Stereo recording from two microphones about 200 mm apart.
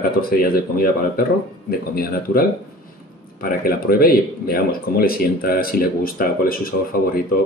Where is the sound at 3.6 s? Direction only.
50° left (ahead or behind).